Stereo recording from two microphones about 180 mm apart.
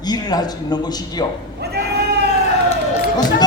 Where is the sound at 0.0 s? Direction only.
20° left (ahead or behind).